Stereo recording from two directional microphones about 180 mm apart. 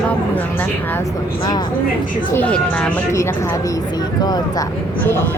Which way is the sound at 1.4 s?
25° left (ahead or behind).